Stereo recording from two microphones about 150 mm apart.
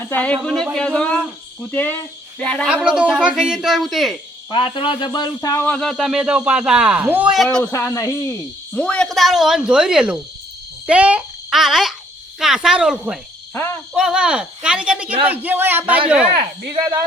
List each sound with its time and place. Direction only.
0.0 s speech: 10° left (ahead or behind)
2.6 s speech: 5° right (ahead or behind)
4.5 s speech: 35° left (ahead or behind)
5.6 s speech: 5° left (ahead or behind)
7.6 s speech: 15° left (ahead or behind)
8.7 s a child's voice: 5° left (ahead or behind)
13.5 s speech: 15° left (ahead or behind)
13.9 s speech: 5° right (ahead or behind)
16.7 s speech: 30° right (ahead or behind)